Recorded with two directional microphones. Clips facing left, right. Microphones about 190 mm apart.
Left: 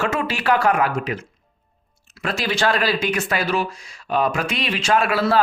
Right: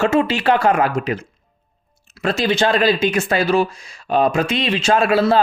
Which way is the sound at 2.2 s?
25° right (ahead or behind).